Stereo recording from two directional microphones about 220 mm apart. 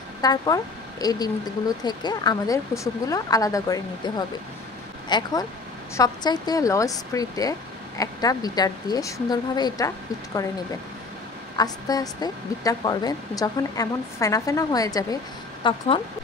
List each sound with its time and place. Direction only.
0.2 s a woman's voice: 15° left (ahead or behind)
5.1 s a woman's voice: 15° left (ahead or behind)
11.5 s a woman's voice: 15° left (ahead or behind)